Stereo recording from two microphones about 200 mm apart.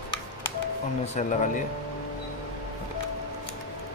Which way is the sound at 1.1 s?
40° left (ahead or behind).